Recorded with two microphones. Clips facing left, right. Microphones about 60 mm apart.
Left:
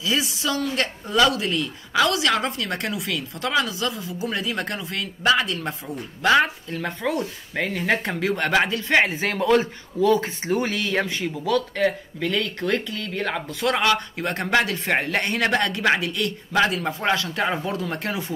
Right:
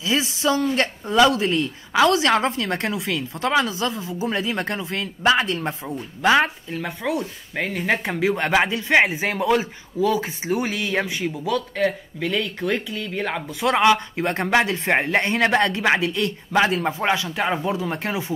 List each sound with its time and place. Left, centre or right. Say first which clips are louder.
0.0 s speech: right 3 dB; right
6.8 s speech: even; centre; by 18.2 s right